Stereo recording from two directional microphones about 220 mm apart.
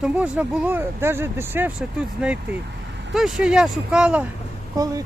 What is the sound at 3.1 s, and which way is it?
Speech, centre (ahead or behind).